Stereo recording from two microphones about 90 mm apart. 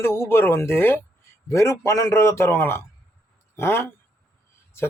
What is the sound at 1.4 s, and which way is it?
A man's voice, 35° left (ahead or behind).